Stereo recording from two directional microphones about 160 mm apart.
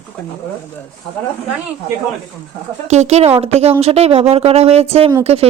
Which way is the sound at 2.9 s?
45° right (ahead or behind).